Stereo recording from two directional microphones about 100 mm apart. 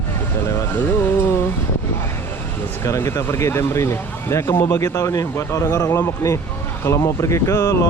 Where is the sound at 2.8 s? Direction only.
30° left (ahead or behind).